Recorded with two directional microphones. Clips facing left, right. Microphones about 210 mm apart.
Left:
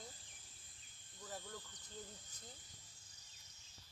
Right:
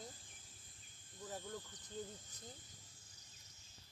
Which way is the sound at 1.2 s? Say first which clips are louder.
Right 3 dB; 15° right (ahead or behind).